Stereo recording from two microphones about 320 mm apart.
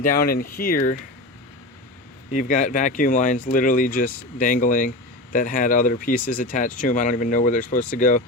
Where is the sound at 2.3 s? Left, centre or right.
Left.